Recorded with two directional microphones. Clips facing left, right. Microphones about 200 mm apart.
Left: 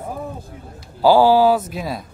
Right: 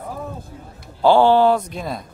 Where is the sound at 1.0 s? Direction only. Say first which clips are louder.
Left 1 dB; 5° left (ahead or behind).